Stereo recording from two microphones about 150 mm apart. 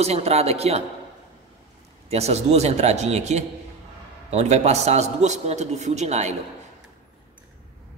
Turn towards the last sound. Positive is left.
turn(degrees=-50)  # may be behind; listen again after turning